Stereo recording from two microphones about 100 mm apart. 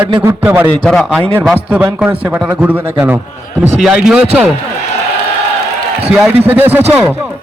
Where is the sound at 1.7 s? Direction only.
15° right (ahead or behind).